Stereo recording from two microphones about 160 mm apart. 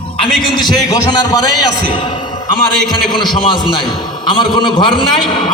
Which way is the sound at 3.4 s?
30° left (ahead or behind).